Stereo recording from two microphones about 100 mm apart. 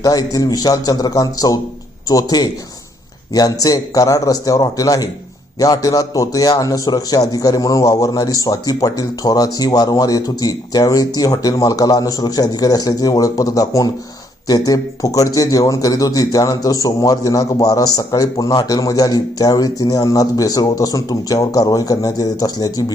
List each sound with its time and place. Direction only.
0.0 s a man's voice: 40° left (ahead or behind)